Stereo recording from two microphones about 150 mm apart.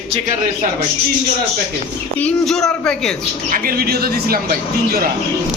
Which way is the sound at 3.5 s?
75° right (ahead or behind).